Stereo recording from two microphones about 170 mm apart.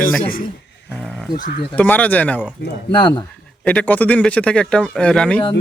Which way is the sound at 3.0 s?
25° left (ahead or behind).